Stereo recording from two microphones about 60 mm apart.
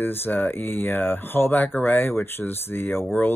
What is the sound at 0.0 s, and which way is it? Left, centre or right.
Speech, left.